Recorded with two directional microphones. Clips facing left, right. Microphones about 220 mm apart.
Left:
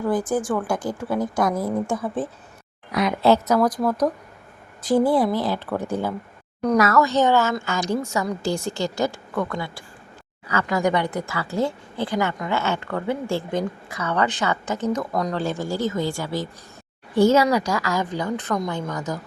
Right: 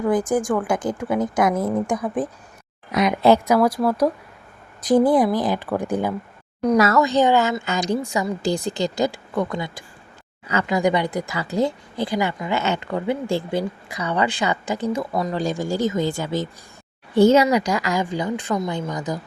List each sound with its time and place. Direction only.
0.1 s speech: 15° right (ahead or behind)
2.9 s speech: 15° right (ahead or behind)
6.7 s speech: 30° right (ahead or behind)
7.0 s speech: 15° right (ahead or behind)